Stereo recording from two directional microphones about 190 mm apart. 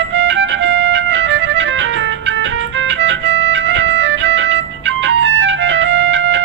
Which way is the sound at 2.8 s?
70° right (ahead or behind).